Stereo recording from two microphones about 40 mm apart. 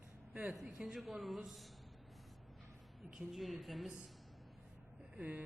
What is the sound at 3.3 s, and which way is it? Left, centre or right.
Speech, centre.